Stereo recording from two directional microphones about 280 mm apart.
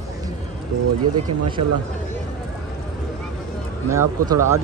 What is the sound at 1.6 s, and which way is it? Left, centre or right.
Speech, right.